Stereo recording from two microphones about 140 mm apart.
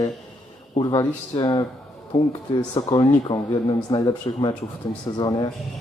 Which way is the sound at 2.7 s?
30° left (ahead or behind).